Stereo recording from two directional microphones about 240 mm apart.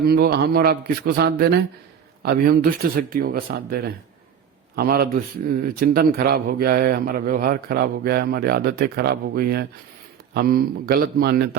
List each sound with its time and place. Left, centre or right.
0.0 s a man's voice: right